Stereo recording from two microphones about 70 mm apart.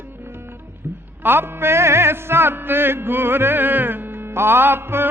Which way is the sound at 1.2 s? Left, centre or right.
Right.